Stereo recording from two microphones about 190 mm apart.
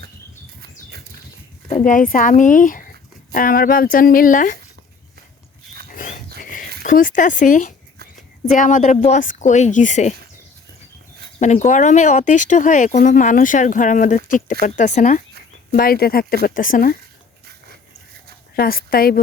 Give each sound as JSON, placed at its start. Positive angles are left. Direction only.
{"t": 0.6, "sound": "a sound", "side_deg": -55}
{"t": 1.8, "sound": "speech", "side_deg": 45}
{"t": 5.9, "sound": "a sound", "side_deg": 45}
{"t": 6.8, "sound": "speech", "side_deg": 45}
{"t": 11.3, "sound": "speech", "side_deg": 40}
{"t": 18.5, "sound": "speech", "side_deg": 50}